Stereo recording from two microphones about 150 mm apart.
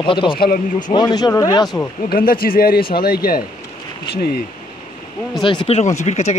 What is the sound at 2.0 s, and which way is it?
Speech, 75° left (ahead or behind).